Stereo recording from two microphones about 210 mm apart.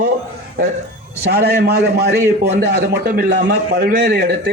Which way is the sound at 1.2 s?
50° right (ahead or behind).